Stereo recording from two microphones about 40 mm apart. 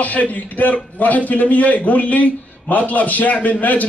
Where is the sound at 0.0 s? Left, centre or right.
Left.